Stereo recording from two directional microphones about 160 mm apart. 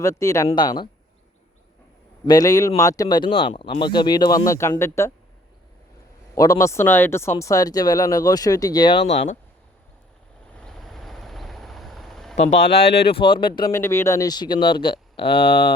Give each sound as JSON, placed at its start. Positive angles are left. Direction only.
{"t": 0.0, "sound": "speech", "side_deg": 20}
{"t": 2.2, "sound": "speech", "side_deg": 25}
{"t": 6.3, "sound": "speech", "side_deg": 20}
{"t": 10.5, "sound": "vehicle", "side_deg": 5}
{"t": 12.5, "sound": "speech", "side_deg": 90}
{"t": 13.1, "sound": "speech", "side_deg": 35}
{"t": 13.7, "sound": "speech", "side_deg": 15}